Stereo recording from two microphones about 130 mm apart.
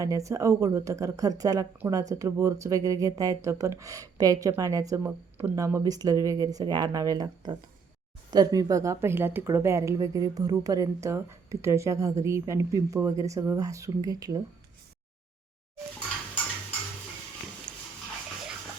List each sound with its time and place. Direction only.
0.0 s a woman's voice: 25° right (ahead or behind)